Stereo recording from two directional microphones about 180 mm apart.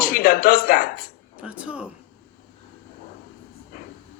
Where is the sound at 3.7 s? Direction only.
55° left (ahead or behind).